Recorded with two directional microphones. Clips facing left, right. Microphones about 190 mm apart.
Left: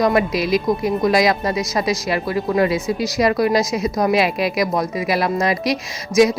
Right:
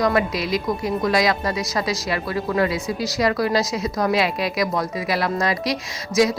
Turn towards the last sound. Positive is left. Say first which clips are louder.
# left 4 dB
turn(degrees=20)  # may be behind; listen again after turning